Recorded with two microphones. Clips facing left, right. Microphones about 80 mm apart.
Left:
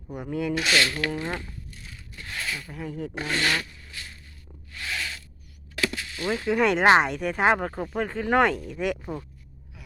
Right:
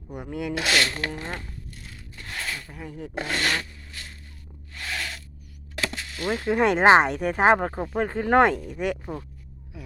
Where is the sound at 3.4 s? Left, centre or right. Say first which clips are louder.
Left 2 dB; right.